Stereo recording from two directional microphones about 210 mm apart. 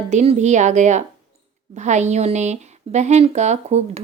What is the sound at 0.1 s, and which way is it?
Speech, 30° right (ahead or behind).